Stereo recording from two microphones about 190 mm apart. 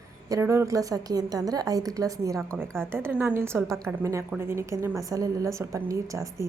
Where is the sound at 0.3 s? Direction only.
15° right (ahead or behind).